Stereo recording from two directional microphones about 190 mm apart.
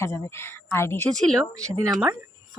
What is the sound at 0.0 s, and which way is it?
Speech, 15° left (ahead or behind).